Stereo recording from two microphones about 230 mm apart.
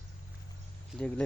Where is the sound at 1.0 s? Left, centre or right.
Centre.